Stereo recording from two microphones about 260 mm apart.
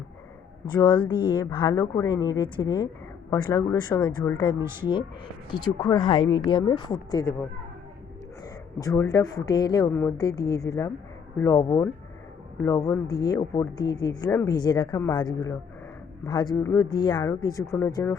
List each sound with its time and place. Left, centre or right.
0.7 s speech: centre
8.8 s speech: centre